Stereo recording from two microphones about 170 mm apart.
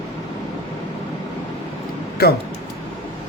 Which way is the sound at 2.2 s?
65° left (ahead or behind).